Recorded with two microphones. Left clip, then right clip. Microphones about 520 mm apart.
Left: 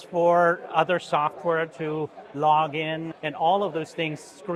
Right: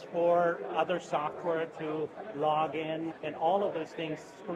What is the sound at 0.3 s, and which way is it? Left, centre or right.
Speech, left.